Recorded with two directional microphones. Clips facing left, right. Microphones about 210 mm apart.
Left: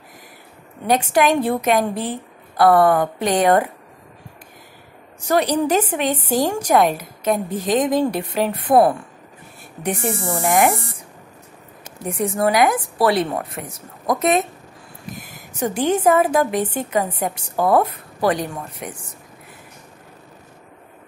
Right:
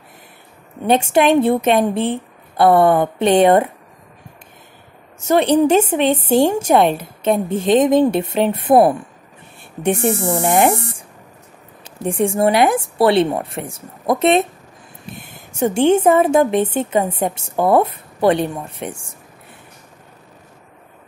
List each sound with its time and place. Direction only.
0.8 s a woman's voice: 25° right (ahead or behind)
5.2 s a woman's voice: 25° right (ahead or behind)